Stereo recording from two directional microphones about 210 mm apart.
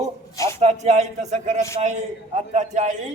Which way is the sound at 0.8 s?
30° right (ahead or behind).